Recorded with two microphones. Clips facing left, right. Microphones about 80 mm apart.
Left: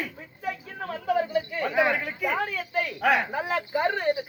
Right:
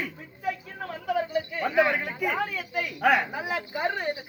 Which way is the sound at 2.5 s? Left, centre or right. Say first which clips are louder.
Left 2 dB; centre.